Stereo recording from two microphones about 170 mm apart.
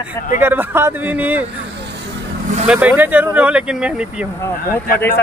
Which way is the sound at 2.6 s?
5° right (ahead or behind).